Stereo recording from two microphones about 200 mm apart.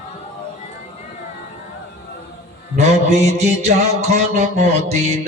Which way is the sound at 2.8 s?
35° right (ahead or behind).